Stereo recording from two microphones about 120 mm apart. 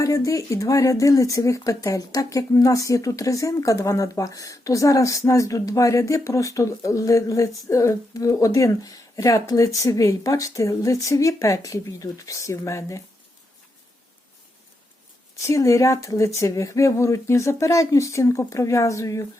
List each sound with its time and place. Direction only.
0.0 s speech: 25° left (ahead or behind)
15.4 s speech: 25° left (ahead or behind)